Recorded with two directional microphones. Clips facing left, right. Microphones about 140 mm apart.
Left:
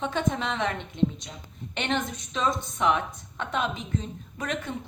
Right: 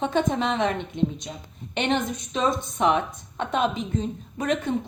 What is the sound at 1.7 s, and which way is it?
Speech, 20° right (ahead or behind).